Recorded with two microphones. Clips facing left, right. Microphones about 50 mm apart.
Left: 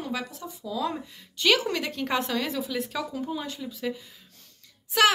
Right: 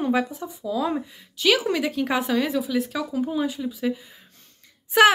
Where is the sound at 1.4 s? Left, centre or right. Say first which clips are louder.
Right 3 dB; centre.